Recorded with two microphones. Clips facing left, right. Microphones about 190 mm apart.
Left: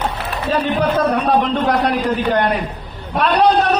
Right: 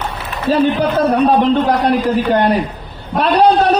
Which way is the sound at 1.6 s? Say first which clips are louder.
Right 3 dB; 30° right (ahead or behind).